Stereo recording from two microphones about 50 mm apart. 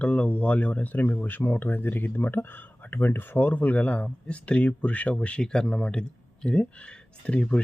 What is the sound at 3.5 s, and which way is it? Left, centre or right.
Speech, left.